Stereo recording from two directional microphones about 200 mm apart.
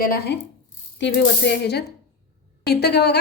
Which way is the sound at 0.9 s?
60° left (ahead or behind).